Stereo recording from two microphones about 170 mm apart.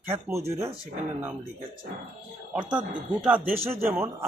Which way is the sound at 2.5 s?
10° right (ahead or behind).